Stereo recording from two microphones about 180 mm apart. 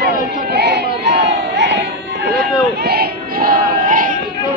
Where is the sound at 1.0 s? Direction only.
75° right (ahead or behind).